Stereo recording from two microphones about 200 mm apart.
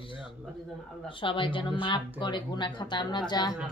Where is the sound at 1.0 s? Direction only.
25° left (ahead or behind).